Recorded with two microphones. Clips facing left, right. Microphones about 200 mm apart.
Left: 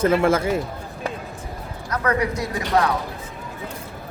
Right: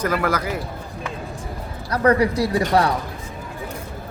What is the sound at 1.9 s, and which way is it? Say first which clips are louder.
A woman's voice: right 5 dB; 35° right (ahead or behind).